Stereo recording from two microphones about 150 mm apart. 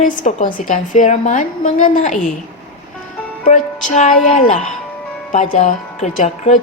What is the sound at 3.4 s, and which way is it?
A woman's voice, 60° left (ahead or behind).